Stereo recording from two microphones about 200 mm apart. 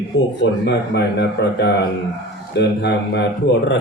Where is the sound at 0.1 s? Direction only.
60° left (ahead or behind).